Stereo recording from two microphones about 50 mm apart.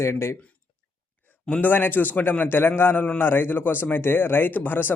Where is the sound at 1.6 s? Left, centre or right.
Left.